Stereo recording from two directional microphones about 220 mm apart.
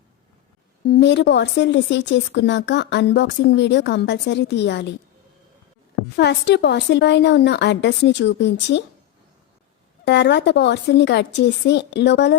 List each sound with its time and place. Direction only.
0.9 s speech: 50° left (ahead or behind)
6.1 s speech: 50° left (ahead or behind)
10.1 s speech: 50° left (ahead or behind)